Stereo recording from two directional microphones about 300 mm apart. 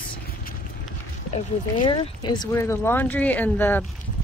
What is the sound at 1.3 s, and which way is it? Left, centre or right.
Speech, centre.